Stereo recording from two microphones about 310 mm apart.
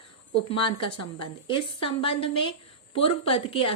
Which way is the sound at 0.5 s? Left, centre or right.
Centre.